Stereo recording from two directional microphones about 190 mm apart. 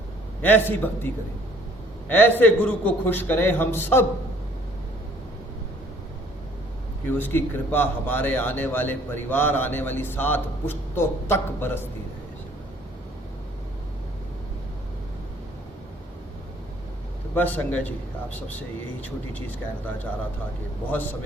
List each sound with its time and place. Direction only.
0.4 s speech: 10° left (ahead or behind)
7.1 s speech: 10° left (ahead or behind)
17.3 s speech: 10° left (ahead or behind)
20.9 s speech: 10° left (ahead or behind)